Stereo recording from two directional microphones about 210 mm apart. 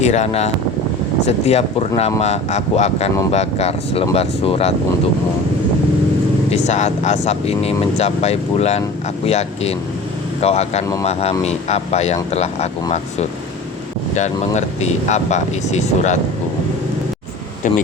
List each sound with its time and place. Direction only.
0.0 s speech: 30° left (ahead or behind)
6.5 s speech: 35° left (ahead or behind)
14.1 s speech: 35° left (ahead or behind)